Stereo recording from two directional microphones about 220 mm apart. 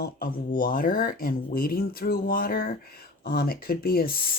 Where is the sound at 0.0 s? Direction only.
40° left (ahead or behind).